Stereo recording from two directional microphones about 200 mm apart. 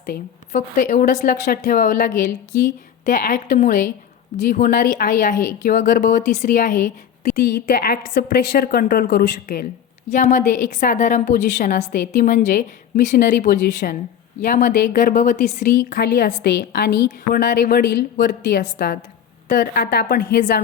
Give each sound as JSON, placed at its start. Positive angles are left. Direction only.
{"t": 0.0, "sound": "a woman's voice", "side_deg": 45}
{"t": 10.1, "sound": "a woman's voice", "side_deg": 35}
{"t": 15.1, "sound": "a woman's voice", "side_deg": 35}
{"t": 15.9, "sound": "a woman's voice", "side_deg": 60}
{"t": 18.6, "sound": "a woman's voice", "side_deg": 45}